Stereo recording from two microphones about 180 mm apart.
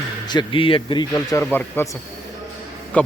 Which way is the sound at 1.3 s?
10° left (ahead or behind).